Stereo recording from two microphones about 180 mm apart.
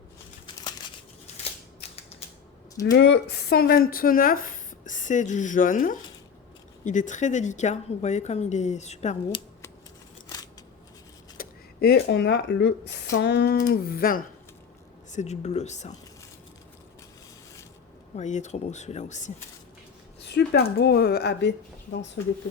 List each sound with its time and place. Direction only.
2.8 s a woman's voice: 70° left (ahead or behind); by 9.4 s 35° left (ahead or behind)
11.3 s speech: 60° left (ahead or behind)
13.6 s speech: 55° left (ahead or behind)
15.1 s a woman's voice: 40° left (ahead or behind)
18.2 s a woman's voice: 40° left (ahead or behind)
20.2 s speech: 65° left (ahead or behind)